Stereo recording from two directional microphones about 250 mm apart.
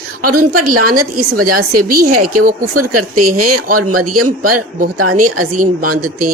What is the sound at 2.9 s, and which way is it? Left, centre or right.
A man's voice, right.